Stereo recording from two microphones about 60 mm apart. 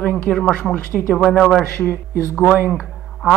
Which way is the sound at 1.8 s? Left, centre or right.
Left.